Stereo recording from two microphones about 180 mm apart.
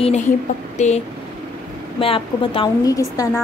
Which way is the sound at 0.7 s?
40° left (ahead or behind).